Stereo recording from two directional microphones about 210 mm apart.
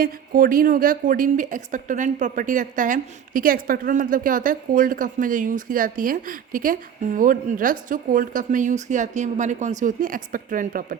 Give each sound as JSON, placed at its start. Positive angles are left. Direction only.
{"t": 0.0, "sound": "a woman's voice", "side_deg": -40}